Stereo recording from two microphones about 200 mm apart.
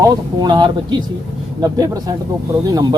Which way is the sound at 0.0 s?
20° right (ahead or behind).